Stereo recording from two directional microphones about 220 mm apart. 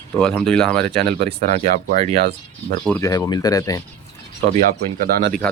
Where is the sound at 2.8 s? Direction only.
5° left (ahead or behind).